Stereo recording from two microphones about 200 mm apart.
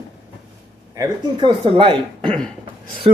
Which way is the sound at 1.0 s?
25° right (ahead or behind).